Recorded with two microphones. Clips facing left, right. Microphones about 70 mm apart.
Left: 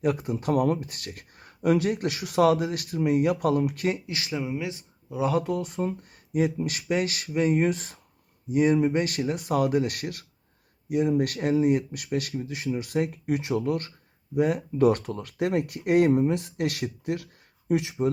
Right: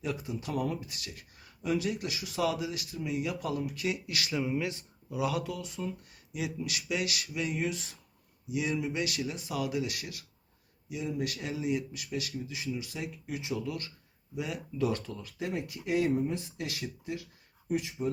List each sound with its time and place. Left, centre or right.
0.0 s speech: left
3.9 s speech: left
5.2 s speech: left
17.7 s speech: left